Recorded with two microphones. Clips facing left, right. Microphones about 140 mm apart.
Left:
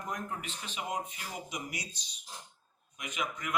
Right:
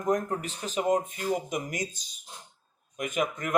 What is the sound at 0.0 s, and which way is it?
Speech, 45° right (ahead or behind).